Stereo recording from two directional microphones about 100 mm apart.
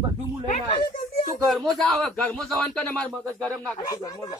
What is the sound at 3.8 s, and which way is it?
Speech, 40° left (ahead or behind).